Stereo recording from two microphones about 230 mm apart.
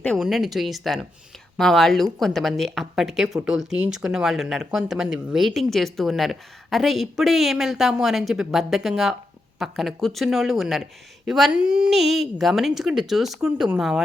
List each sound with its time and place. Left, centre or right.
0.0 s speech: centre